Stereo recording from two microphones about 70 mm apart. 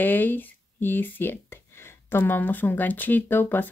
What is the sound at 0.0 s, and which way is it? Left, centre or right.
Speech, left.